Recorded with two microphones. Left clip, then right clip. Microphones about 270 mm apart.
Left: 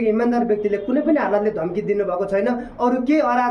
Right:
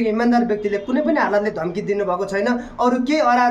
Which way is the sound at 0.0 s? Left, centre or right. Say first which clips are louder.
Right 1 dB; centre.